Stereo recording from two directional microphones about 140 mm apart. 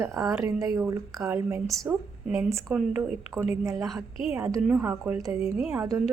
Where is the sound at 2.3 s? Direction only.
20° right (ahead or behind).